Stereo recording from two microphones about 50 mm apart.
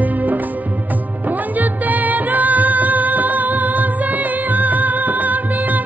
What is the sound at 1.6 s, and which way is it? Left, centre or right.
Music, right.